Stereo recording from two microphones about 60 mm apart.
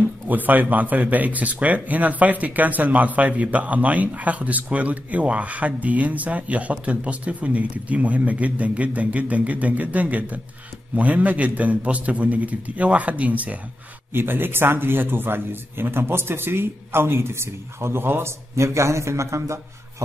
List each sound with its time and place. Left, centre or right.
0.3 s speech: right
14.1 s a man's voice: right